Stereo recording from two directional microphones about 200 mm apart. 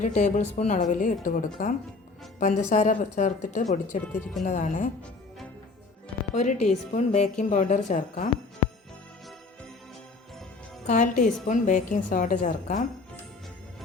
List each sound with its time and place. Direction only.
0.0 s a woman's voice: 35° left (ahead or behind)
3.8 s speech: 10° left (ahead or behind)
4.4 s a woman's voice: 40° left (ahead or behind)
6.3 s a woman's voice: 35° left (ahead or behind)
10.8 s a woman's voice: 40° left (ahead or behind)